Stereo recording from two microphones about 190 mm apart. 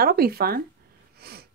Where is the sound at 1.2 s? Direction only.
55° right (ahead or behind).